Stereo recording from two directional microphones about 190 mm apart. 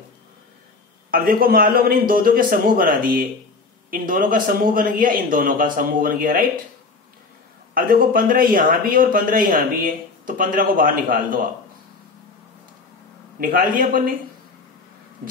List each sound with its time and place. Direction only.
1.1 s speech: 50° right (ahead or behind)
7.7 s speech: 50° right (ahead or behind)
13.4 s speech: 45° right (ahead or behind)